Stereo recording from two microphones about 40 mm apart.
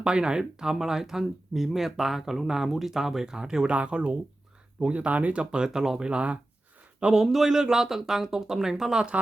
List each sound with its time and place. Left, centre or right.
0.0 s speech: right
3.7 s speech: right; by 6.0 s centre
6.0 s speech: right
7.1 s speech: centre